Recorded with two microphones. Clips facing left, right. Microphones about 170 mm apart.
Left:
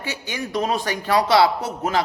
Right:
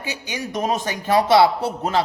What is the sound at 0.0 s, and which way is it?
A man's voice, 15° right (ahead or behind).